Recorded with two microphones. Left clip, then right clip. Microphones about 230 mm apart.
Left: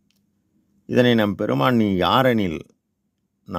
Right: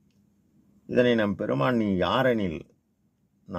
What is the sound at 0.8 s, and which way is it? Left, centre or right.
Speech, left.